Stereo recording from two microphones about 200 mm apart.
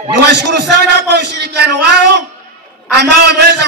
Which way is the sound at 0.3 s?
60° right (ahead or behind).